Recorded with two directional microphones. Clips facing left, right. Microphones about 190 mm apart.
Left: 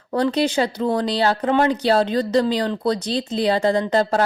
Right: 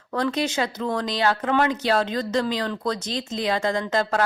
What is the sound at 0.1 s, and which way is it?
Speech, 35° left (ahead or behind).